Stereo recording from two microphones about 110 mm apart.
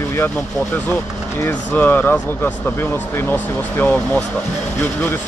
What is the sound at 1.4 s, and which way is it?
Speech, 15° left (ahead or behind).